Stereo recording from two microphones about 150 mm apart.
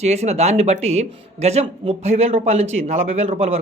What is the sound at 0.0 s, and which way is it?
Speech, 45° right (ahead or behind).